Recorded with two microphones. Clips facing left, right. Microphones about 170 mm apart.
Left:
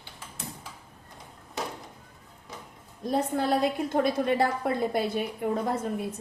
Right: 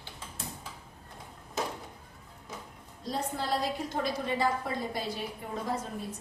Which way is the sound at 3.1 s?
55° left (ahead or behind).